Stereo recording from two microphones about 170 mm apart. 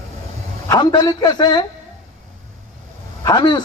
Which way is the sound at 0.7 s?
25° left (ahead or behind).